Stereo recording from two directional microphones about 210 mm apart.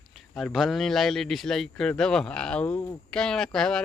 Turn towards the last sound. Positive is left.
turn(degrees=5)  # may be behind; listen again after turning